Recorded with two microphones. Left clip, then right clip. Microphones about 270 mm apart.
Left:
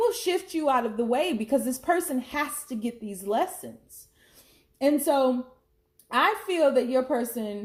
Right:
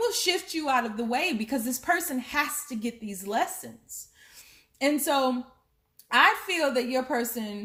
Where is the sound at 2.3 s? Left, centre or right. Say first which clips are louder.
Right 5 dB; right.